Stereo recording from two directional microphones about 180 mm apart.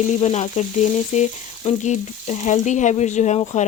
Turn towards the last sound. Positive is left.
turn(degrees=40)  # may be behind; listen again after turning